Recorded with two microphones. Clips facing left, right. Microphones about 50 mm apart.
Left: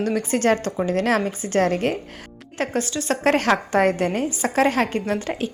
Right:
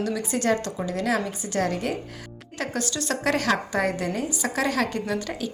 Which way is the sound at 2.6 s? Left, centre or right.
Left.